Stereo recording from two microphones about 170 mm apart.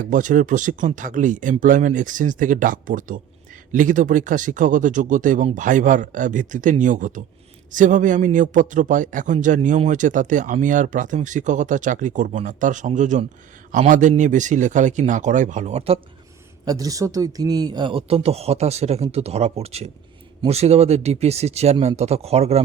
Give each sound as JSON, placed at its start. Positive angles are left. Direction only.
{"t": 0.0, "sound": "speech", "side_deg": -50}
{"t": 16.6, "sound": "speech", "side_deg": -20}